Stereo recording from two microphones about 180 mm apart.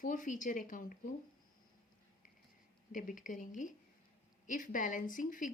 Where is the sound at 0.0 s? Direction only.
45° left (ahead or behind).